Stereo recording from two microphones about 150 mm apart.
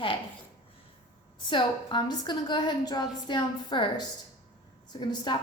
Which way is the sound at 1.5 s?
30° left (ahead or behind).